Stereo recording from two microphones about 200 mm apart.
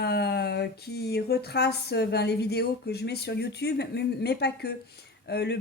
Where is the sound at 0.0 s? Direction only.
55° left (ahead or behind).